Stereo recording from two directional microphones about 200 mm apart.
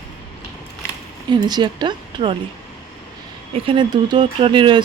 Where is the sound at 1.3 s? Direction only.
20° right (ahead or behind).